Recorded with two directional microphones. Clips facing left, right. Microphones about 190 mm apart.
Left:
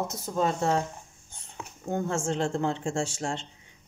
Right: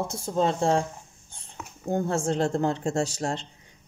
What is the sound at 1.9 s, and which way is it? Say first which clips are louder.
Speech: right 3 dB; 35° right (ahead or behind).